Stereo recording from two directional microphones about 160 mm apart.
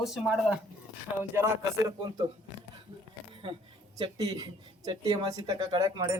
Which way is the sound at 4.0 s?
25° right (ahead or behind).